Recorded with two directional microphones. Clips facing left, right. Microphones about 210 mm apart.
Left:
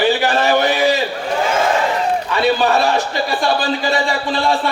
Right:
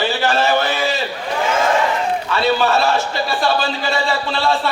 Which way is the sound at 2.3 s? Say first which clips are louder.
Left 1 dB; 15° left (ahead or behind).